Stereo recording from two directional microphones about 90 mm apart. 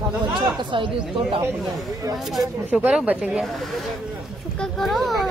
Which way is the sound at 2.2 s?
Centre (ahead or behind).